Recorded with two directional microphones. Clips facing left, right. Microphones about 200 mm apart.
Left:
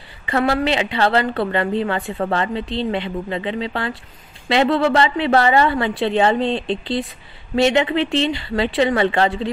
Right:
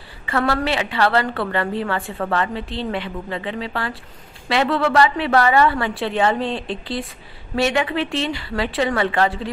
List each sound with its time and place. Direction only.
0.3 s a woman's voice: 20° left (ahead or behind)